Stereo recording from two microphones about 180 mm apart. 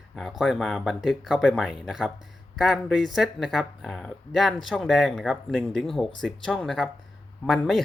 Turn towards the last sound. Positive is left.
turn(degrees=0)  # may be behind; listen again after turning